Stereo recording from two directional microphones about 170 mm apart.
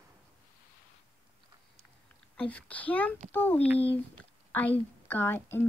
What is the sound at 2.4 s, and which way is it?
Speech, 5° left (ahead or behind).